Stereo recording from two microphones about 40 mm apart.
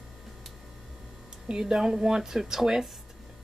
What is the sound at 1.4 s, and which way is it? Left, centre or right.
A woman's voice, centre.